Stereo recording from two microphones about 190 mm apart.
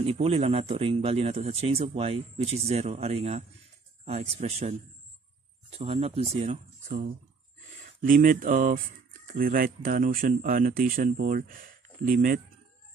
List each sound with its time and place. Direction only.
0.0 s speech: 30° right (ahead or behind); by 12.4 s 45° right (ahead or behind)